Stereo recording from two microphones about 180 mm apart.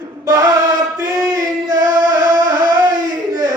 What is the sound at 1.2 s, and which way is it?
Singing, 20° right (ahead or behind).